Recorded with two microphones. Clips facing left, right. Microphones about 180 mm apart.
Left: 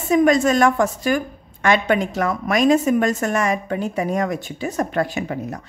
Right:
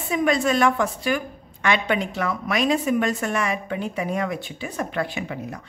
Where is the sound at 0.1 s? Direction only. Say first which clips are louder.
Left 6 dB; 45° left (ahead or behind).